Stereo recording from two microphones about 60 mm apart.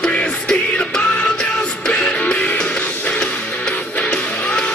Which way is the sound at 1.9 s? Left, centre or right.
Left.